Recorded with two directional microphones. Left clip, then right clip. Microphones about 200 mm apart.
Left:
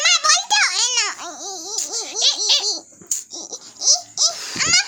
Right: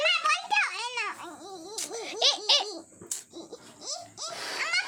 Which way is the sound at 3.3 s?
55° left (ahead or behind).